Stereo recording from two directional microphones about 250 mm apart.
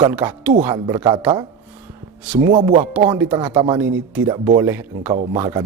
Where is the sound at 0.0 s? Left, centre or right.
Centre.